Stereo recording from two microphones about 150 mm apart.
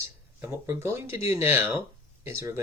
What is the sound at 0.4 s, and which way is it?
Speech, 15° right (ahead or behind).